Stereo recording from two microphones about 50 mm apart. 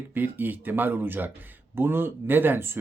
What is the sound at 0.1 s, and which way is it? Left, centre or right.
Speech, right.